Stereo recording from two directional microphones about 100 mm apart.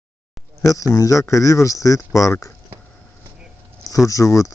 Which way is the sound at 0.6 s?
35° left (ahead or behind).